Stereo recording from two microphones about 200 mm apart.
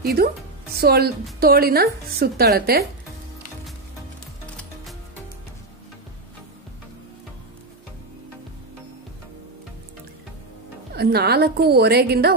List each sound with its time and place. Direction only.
0.0 s a woman's voice: 50° right (ahead or behind)
11.0 s a woman's voice: 50° right (ahead or behind)